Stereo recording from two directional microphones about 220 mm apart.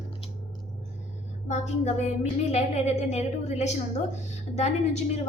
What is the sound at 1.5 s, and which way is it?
A woman's voice, 30° left (ahead or behind).